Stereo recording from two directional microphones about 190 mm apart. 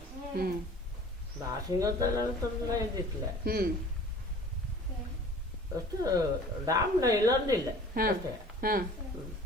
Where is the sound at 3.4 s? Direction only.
55° right (ahead or behind).